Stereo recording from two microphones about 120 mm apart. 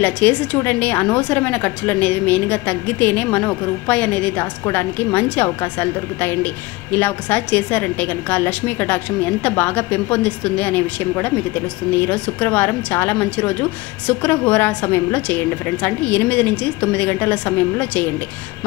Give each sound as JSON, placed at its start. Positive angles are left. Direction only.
{"t": 0.0, "sound": "a woman's voice", "side_deg": 15}